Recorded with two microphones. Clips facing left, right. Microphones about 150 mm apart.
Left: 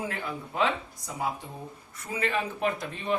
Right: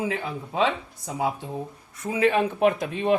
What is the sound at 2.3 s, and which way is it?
Speech, 65° right (ahead or behind).